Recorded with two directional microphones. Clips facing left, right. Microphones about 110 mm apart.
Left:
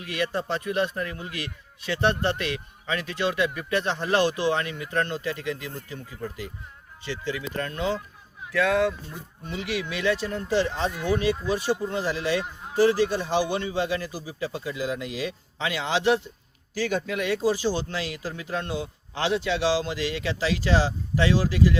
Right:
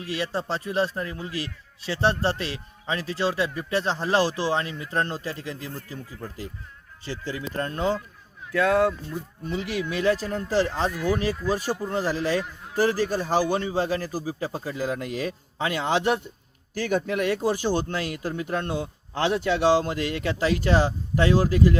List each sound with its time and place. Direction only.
0.0 s a man's voice: 30° right (ahead or behind)
10.9 s speech: 20° left (ahead or behind)
11.4 s a man's voice: 40° right (ahead or behind)